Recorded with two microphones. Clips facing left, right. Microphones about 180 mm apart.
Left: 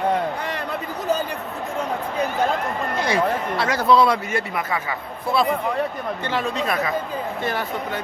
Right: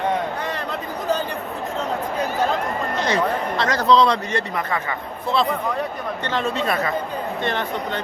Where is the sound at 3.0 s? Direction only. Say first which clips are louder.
Even; 10° left (ahead or behind).